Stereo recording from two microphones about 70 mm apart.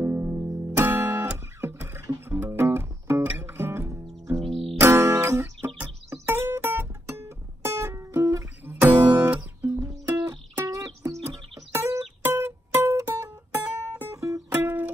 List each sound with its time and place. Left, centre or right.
0.0 s music: right
8.6 s music: right
9.0 s guitar: right
9.8 s music: right
12.2 s music: right
14.5 s music: right